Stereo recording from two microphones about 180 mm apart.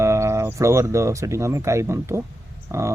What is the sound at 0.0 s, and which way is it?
Speech, 15° right (ahead or behind).